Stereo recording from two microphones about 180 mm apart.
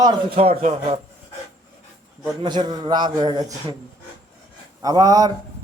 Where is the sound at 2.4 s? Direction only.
25° right (ahead or behind).